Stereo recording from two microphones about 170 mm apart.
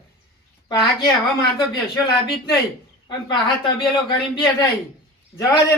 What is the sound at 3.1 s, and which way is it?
Speech, 25° left (ahead or behind).